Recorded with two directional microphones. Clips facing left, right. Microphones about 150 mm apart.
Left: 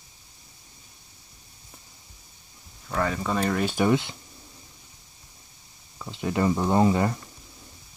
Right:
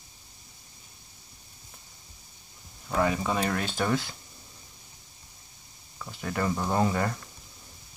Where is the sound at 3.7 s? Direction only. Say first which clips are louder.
Left 7 dB; 20° left (ahead or behind).